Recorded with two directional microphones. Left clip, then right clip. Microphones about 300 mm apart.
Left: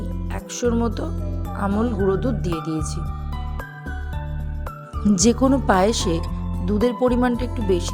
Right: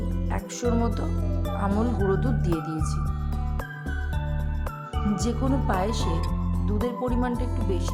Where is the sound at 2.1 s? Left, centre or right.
Centre.